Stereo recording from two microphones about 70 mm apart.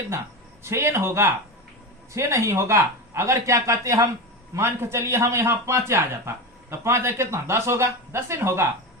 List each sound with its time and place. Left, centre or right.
0.6 s a man's voice: right
4.5 s a man's voice: right